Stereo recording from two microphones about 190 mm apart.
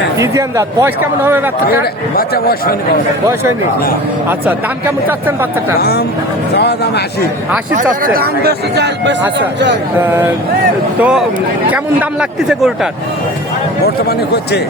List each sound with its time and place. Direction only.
0.2 s a man's voice: 15° right (ahead or behind)
1.8 s speech: 55° left (ahead or behind)
5.0 s a man's voice: 10° right (ahead or behind)
6.5 s a man's voice: 60° left (ahead or behind)
7.8 s speech: 50° right (ahead or behind)
10.0 s a man's voice: 10° right (ahead or behind)
12.5 s speech: centre (ahead or behind)